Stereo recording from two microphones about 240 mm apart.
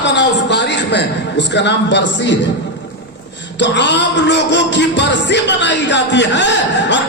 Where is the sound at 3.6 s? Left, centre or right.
Left.